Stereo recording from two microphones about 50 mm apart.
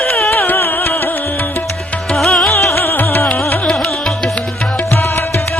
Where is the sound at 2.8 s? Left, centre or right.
Left.